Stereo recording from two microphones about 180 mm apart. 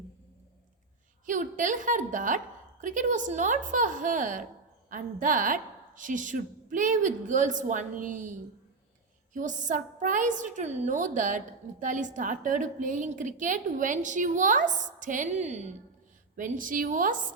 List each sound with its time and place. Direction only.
1.3 s a woman's voice: 45° right (ahead or behind)